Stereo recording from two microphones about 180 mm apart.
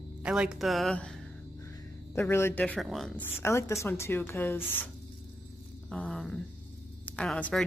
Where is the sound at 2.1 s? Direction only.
15° left (ahead or behind).